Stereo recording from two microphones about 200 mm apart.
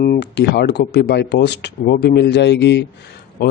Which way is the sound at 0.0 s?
55° left (ahead or behind).